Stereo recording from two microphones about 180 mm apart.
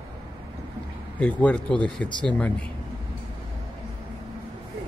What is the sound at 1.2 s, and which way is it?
Speech, 5° left (ahead or behind).